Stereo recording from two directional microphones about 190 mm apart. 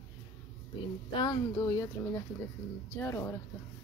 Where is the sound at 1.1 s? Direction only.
20° left (ahead or behind).